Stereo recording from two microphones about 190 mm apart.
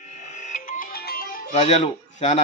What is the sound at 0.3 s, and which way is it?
Music, 40° left (ahead or behind).